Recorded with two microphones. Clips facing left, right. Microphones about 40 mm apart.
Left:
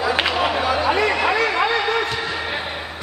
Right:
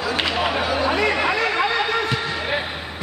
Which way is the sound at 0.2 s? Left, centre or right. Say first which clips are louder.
Left 2 dB; centre.